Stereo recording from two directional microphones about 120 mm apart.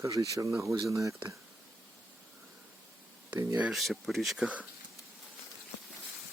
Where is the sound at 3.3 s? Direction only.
25° right (ahead or behind).